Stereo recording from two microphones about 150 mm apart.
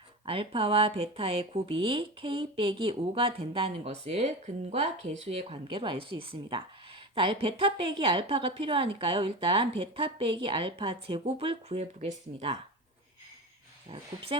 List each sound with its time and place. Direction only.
0.3 s a woman's voice: 40° right (ahead or behind)